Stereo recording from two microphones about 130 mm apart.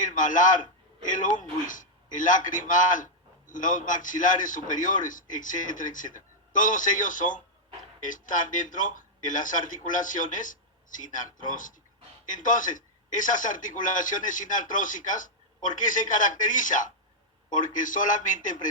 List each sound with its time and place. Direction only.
0.0 s a man's voice: 90° left